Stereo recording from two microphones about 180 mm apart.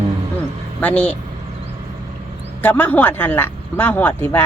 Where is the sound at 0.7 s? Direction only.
5° left (ahead or behind).